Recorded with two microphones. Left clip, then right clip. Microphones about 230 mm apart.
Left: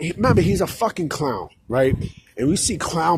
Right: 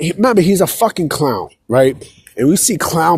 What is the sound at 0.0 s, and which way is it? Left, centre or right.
Speech, right.